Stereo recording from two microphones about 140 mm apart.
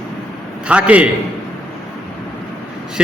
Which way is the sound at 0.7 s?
10° right (ahead or behind).